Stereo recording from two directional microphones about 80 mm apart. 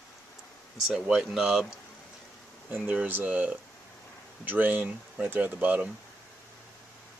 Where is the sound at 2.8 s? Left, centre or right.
Centre.